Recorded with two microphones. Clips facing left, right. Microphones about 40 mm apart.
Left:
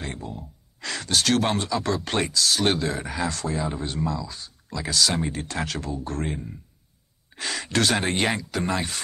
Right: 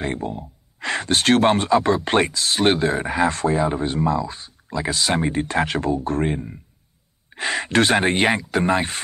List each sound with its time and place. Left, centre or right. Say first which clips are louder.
0.0 s speech: right 8 dB; right